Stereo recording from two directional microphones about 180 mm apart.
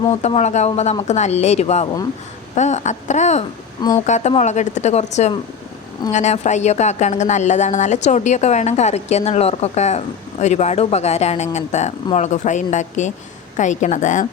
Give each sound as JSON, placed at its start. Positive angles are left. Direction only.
{"t": 0.1, "sound": "speech", "side_deg": 35}
{"t": 3.8, "sound": "speech", "side_deg": 20}
{"t": 4.0, "sound": "a woman's voice", "side_deg": 40}